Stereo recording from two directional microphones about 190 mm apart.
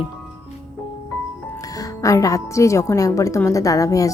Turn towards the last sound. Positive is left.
turn(degrees=15)  # may be behind; listen again after turning